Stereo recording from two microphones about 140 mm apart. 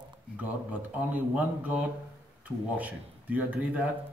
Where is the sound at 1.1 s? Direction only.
10° right (ahead or behind).